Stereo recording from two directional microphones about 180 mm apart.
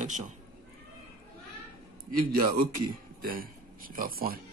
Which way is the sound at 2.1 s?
55° right (ahead or behind).